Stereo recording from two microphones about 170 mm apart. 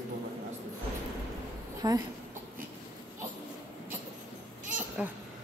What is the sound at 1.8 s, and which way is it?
Speech, 25° right (ahead or behind).